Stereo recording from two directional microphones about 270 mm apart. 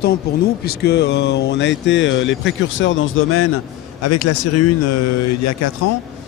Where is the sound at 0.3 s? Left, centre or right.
Left.